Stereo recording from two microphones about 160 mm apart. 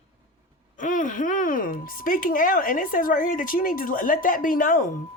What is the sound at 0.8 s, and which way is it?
A woman's voice, 55° left (ahead or behind).